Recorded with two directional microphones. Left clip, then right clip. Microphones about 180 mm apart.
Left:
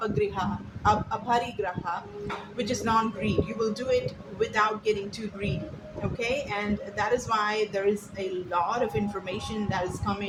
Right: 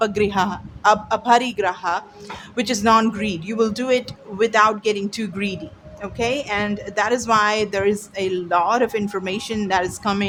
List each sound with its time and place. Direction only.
0.0 s a woman's voice: 45° right (ahead or behind)